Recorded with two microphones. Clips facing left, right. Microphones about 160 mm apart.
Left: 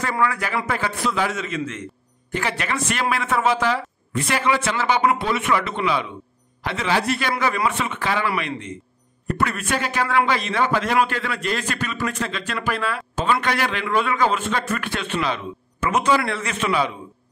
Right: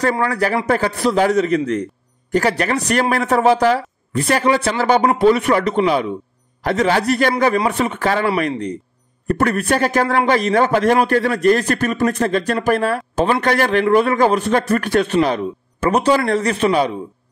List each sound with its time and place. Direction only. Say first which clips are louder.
0.2 s a man's voice: right 4 dB; 40° right (ahead or behind)